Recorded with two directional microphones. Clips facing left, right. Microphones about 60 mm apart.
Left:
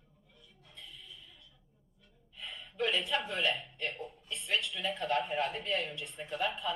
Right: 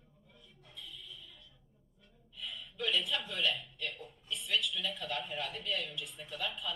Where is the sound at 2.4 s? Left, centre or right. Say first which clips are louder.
Left 4 dB; left.